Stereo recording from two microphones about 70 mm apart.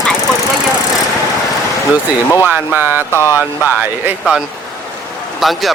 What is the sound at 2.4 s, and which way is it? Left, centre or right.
Speech, right.